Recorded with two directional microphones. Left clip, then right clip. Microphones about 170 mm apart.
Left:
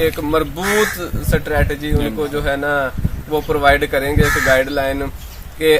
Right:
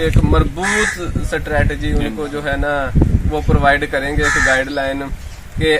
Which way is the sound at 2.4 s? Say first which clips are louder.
Even; 25° left (ahead or behind).